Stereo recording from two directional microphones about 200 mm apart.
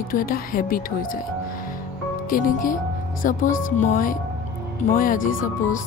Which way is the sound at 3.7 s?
40° left (ahead or behind).